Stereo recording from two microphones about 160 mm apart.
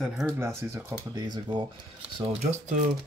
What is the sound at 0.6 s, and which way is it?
Speech, 15° right (ahead or behind).